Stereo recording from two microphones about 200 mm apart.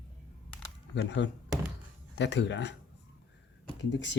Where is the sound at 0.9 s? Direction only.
60° left (ahead or behind).